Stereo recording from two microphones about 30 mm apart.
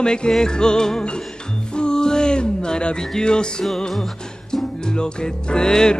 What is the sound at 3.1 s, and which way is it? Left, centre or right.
Music, left.